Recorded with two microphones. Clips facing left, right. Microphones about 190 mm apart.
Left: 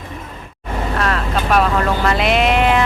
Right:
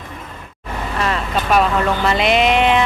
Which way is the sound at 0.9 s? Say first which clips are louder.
Even; centre (ahead or behind).